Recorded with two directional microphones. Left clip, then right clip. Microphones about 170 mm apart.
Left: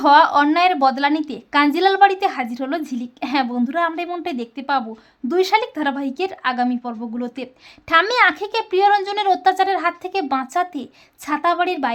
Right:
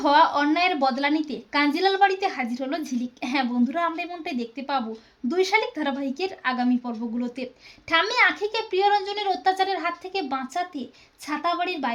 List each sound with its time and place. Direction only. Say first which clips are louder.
0.0 s a woman's voice: left 6 dB; 30° left (ahead or behind)